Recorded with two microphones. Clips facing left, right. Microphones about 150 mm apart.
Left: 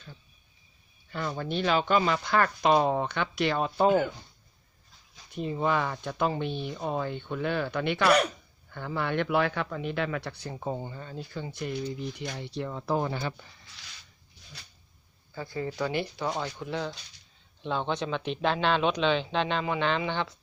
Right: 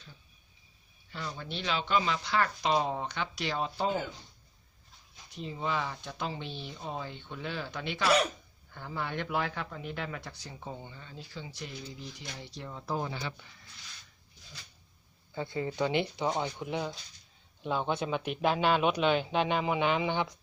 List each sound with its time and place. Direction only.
1.1 s a man's voice: 55° left (ahead or behind)
5.3 s a man's voice: 55° left (ahead or behind)
8.7 s a man's voice: 70° left (ahead or behind); by 13.3 s 55° left (ahead or behind)
15.4 s a man's voice: 25° right (ahead or behind)